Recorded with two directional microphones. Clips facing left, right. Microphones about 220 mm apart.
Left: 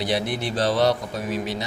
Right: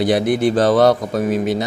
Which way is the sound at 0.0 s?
50° right (ahead or behind).